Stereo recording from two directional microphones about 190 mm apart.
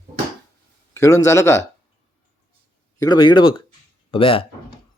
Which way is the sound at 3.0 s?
20° left (ahead or behind).